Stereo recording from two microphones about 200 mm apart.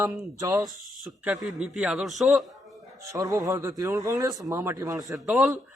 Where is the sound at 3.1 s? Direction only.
15° right (ahead or behind).